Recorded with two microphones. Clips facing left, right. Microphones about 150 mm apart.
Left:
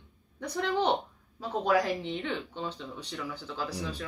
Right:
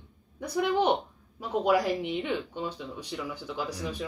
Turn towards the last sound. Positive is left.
turn(degrees=-15)  # may be behind; listen again after turning